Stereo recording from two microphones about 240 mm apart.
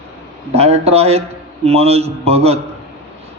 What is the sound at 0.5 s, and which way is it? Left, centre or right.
A man's voice, right.